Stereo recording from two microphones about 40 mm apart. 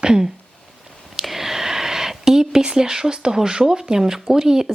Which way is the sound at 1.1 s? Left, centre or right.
Centre.